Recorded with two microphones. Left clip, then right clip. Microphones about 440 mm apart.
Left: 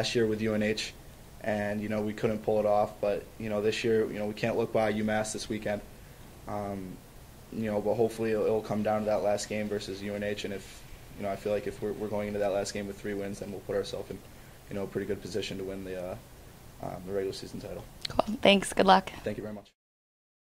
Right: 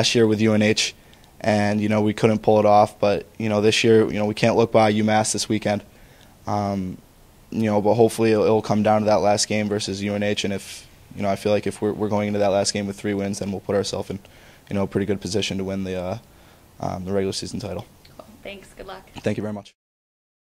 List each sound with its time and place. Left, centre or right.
0.0 s speech: right
18.0 s speech: left
19.2 s speech: right